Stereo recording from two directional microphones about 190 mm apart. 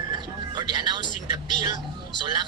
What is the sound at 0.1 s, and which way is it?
Music, 25° right (ahead or behind).